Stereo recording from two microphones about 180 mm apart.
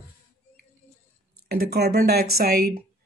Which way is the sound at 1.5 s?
60° right (ahead or behind).